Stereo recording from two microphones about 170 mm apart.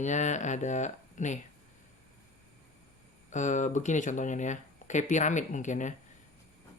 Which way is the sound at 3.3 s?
45° left (ahead or behind).